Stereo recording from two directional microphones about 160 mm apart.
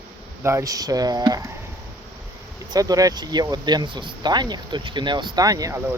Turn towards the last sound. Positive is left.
turn(degrees=-20)  # may be behind; listen again after turning